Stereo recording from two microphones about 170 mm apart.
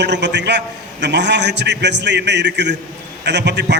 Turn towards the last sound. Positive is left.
turn(degrees=-90)